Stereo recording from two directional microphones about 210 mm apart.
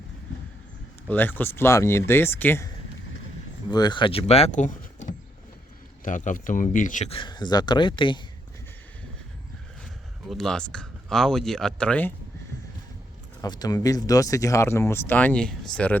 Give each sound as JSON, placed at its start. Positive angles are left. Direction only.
{"t": 1.0, "sound": "speech", "side_deg": 10}
{"t": 3.7, "sound": "speech", "side_deg": 20}
{"t": 10.2, "sound": "speech", "side_deg": 0}
{"t": 13.4, "sound": "speech", "side_deg": 20}